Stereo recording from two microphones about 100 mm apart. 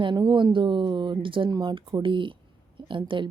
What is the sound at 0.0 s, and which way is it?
Speech, 50° right (ahead or behind).